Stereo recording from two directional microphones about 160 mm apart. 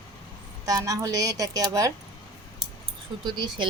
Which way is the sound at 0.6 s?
20° right (ahead or behind).